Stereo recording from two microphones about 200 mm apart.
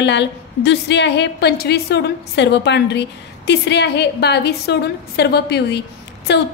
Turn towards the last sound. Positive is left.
turn(degrees=60)  # may be behind; listen again after turning